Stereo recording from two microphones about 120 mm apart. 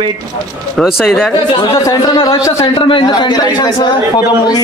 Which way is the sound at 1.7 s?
25° left (ahead or behind).